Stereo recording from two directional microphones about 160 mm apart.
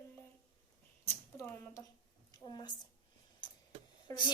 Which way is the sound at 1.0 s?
15° left (ahead or behind).